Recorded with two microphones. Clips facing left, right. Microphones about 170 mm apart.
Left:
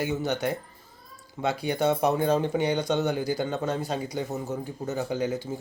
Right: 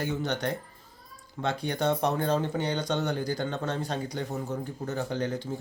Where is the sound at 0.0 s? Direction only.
5° left (ahead or behind).